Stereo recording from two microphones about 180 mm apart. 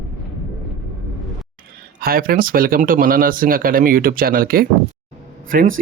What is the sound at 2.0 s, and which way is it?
Speech, 55° right (ahead or behind).